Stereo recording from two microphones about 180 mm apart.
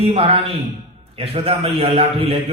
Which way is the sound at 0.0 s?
35° right (ahead or behind).